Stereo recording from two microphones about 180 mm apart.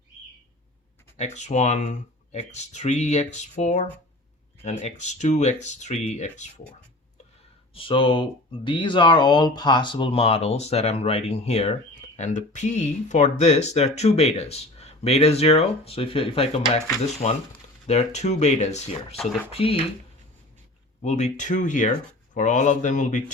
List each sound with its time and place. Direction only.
1.1 s speech: 40° left (ahead or behind)
7.7 s speech: 30° left (ahead or behind)
21.0 s speech: 40° left (ahead or behind)